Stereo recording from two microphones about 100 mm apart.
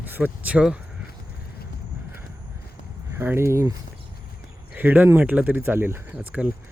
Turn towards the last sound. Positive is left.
turn(degrees=-15)  # may be behind; listen again after turning